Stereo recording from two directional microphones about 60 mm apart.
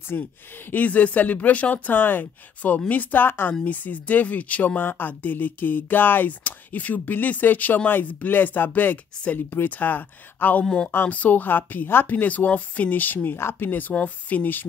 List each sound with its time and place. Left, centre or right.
0.1 s speech: left
10.6 s speech: centre
11.1 s speech: left